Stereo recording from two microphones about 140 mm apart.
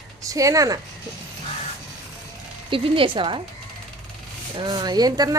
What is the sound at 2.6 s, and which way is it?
Speech, 40° right (ahead or behind).